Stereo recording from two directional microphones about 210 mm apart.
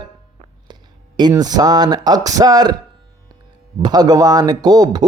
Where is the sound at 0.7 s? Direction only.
20° right (ahead or behind).